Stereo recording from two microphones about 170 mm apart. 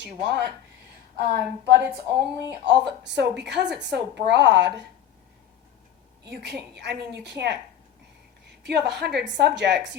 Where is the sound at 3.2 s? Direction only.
85° right.